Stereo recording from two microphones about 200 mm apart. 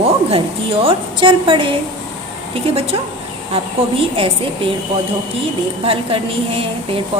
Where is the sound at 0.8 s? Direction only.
25° right (ahead or behind).